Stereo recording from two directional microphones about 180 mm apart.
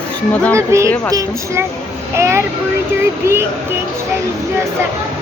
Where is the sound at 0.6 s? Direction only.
15° right (ahead or behind).